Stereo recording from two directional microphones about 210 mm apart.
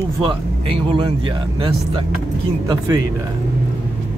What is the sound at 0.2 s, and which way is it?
Speech, 25° right (ahead or behind).